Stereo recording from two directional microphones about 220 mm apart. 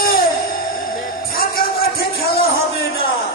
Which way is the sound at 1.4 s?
45° left (ahead or behind).